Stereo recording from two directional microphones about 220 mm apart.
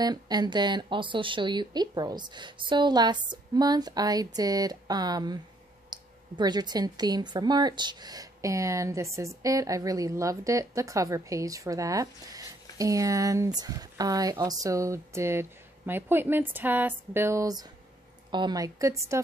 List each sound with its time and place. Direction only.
0.0 s speech: 20° right (ahead or behind)